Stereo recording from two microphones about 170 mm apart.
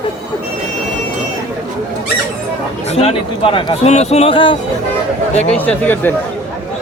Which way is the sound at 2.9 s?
35° left (ahead or behind).